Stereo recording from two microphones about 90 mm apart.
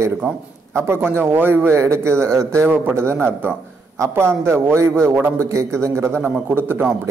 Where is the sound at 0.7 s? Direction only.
30° right (ahead or behind).